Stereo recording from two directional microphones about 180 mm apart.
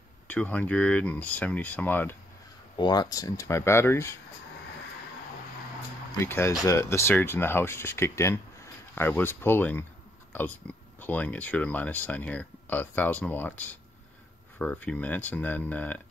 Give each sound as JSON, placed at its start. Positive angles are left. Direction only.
{"t": 0.3, "sound": "speech", "side_deg": 10}
{"t": 2.8, "sound": "speech", "side_deg": 25}
{"t": 6.2, "sound": "speech", "side_deg": 15}
{"t": 11.0, "sound": "speech", "side_deg": 10}